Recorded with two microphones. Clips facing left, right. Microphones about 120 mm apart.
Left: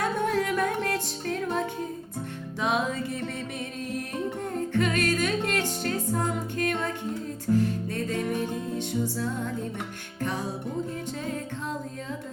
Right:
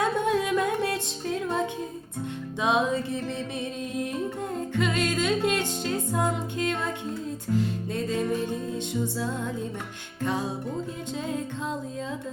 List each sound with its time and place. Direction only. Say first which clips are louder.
0.0 s music: right 1 dB; 20° right (ahead or behind)
2.6 s music: right 3 dB; 20° right (ahead or behind)
4.7 s music: left 1 dB; 20° right (ahead or behind)
7.5 s music: left 3 dB; 10° left (ahead or behind)